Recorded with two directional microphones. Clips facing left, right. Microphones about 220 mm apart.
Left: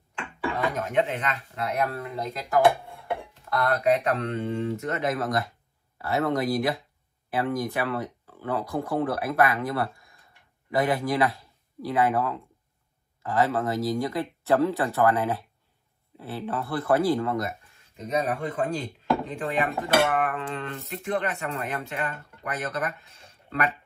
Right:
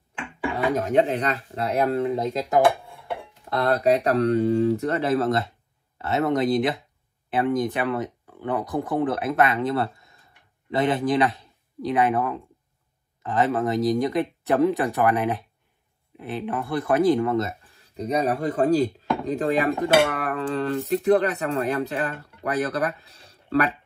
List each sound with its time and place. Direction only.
0.7 s speech: 40° right (ahead or behind)
3.4 s speech: 30° right (ahead or behind)
4.1 s speech: 40° right (ahead or behind)
19.2 s dishes: 40° right (ahead or behind)